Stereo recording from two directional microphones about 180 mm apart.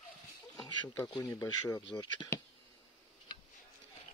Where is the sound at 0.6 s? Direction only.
20° left (ahead or behind).